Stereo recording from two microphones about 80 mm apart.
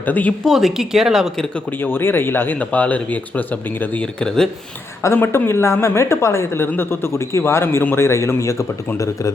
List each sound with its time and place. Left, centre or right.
0.0 s speech: left
0.4 s speech: centre
1.8 s speech: left; by 4.4 s centre
5.0 s a woman's voice: left